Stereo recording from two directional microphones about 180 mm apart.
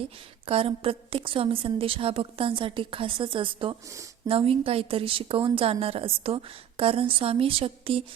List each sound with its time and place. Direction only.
0.4 s a woman's voice: 30° right (ahead or behind)